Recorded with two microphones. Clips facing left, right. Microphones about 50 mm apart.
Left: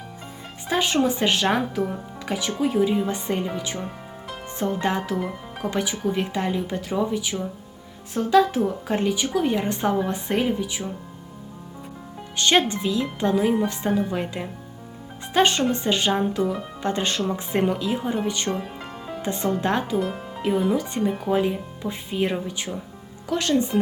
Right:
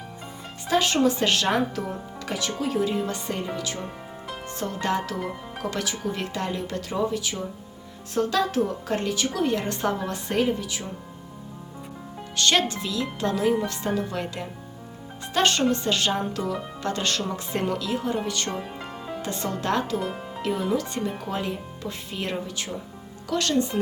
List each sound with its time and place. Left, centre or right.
0.7 s a woman's voice: centre
1.5 s a woman's voice: centre
3.1 s speech: left
3.8 s music: centre
4.6 s speech: centre
5.1 s speech: centre
5.7 s a woman's voice: centre
12.4 s a woman's voice: left
20.0 s a woman's voice: centre